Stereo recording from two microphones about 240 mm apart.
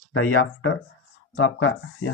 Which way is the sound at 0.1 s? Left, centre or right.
Left.